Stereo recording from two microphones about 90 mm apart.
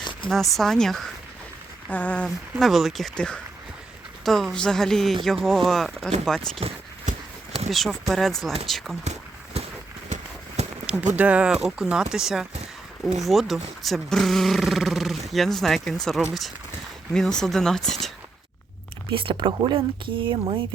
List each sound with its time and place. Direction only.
0.0 s a sound: 65° left (ahead or behind)
0.3 s speech: centre (ahead or behind)
1.9 s speech: 15° left (ahead or behind)
2.6 s speech: centre (ahead or behind)
3.2 s speech: 10° left (ahead or behind)
6.6 s speech: 90° right
7.7 s speech: 5° right (ahead or behind)
11.0 s speech: 15° right (ahead or behind); by 18.1 s 5° left (ahead or behind)
19.1 s speech: 65° right (ahead or behind)